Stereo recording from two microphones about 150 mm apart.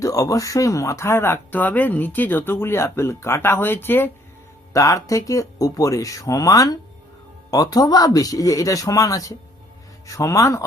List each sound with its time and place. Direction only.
0.0 s speech: 20° left (ahead or behind)